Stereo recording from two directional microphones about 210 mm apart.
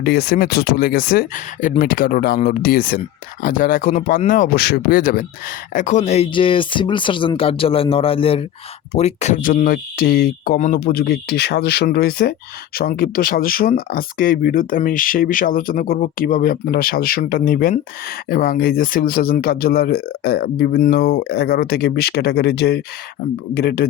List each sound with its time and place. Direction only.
0.0 s speech: 50° left (ahead or behind)